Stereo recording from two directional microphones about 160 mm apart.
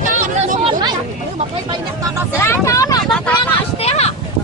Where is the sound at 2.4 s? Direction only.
20° left (ahead or behind).